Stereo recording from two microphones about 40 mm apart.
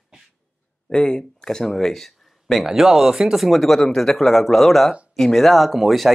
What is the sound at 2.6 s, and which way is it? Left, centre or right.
Speech, centre.